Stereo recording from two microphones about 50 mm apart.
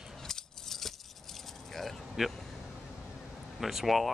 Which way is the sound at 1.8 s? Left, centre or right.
Centre.